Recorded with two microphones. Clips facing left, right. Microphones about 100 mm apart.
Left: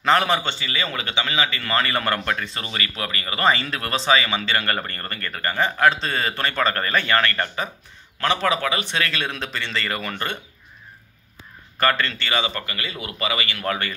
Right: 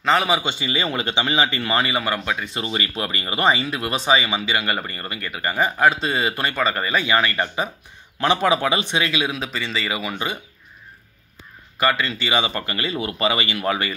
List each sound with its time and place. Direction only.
0.0 s a man's voice: centre (ahead or behind)
0.6 s a man's voice: 20° right (ahead or behind)
11.8 s speech: 5° right (ahead or behind); by 13.6 s 25° right (ahead or behind)
13.6 s a man's voice: 5° right (ahead or behind)